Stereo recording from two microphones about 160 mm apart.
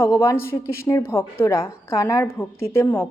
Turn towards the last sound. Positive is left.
turn(degrees=15)  # may be behind; listen again after turning